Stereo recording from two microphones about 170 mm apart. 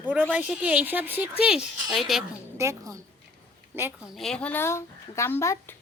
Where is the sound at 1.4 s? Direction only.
5° right (ahead or behind).